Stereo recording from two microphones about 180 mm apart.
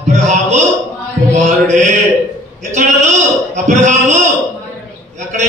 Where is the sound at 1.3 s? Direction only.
40° right (ahead or behind).